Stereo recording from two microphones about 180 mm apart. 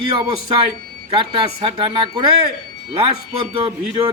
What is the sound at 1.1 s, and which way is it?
Speech, 25° right (ahead or behind).